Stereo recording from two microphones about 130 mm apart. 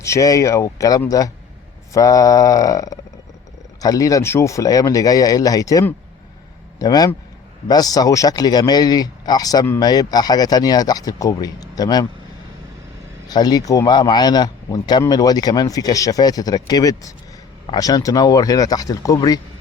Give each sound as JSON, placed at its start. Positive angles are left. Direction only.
{"t": 0.0, "sound": "a man's voice", "side_deg": 25}
{"t": 13.2, "sound": "speech", "side_deg": 30}